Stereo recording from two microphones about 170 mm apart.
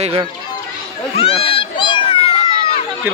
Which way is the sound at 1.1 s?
35° left (ahead or behind).